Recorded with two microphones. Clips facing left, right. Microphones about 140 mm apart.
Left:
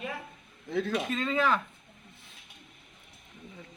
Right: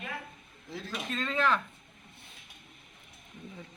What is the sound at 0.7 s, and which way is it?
Speech, 60° left (ahead or behind).